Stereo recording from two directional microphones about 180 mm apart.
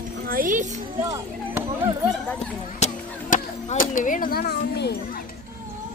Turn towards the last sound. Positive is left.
turn(degrees=65)  # may be behind; listen again after turning